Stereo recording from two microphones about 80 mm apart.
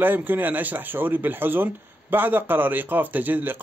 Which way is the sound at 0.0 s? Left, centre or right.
Right.